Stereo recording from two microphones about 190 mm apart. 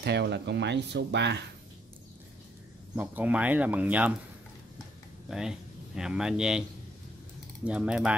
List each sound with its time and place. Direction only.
0.0 s speech: 60° right (ahead or behind)
3.0 s speech: 10° right (ahead or behind)
5.3 s speech: 5° right (ahead or behind)
7.6 s speech: 5° right (ahead or behind)